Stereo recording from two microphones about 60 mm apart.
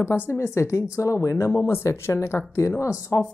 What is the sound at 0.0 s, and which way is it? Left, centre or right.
Speech, left.